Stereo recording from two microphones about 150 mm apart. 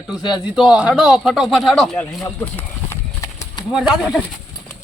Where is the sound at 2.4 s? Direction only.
15° left (ahead or behind).